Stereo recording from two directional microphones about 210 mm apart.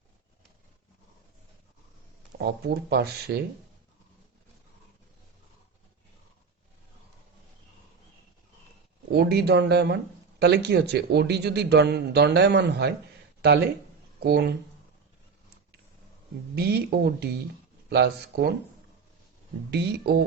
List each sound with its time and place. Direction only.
2.4 s speech: 50° right (ahead or behind)
9.1 s speech: 50° right (ahead or behind)
16.6 s speech: 50° right (ahead or behind)
19.7 s speech: 50° right (ahead or behind)